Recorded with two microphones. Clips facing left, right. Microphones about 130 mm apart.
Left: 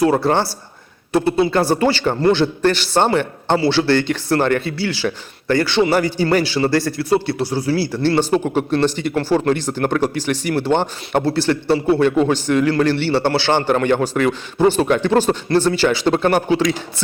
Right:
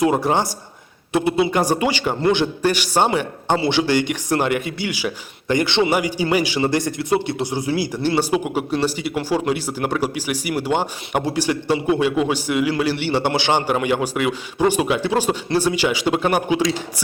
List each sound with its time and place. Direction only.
0.0 s a man's voice: 15° right (ahead or behind)